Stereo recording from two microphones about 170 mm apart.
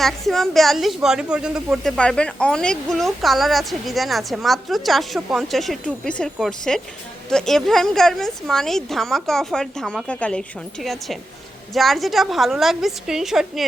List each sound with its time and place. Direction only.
0.0 s a woman's voice: centre (ahead or behind)
11.7 s a woman's voice: centre (ahead or behind)